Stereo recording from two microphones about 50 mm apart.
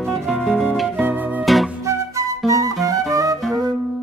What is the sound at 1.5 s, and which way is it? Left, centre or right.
Music, centre.